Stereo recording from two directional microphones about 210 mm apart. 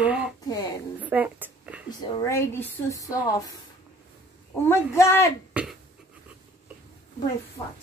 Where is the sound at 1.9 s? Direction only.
15° left (ahead or behind).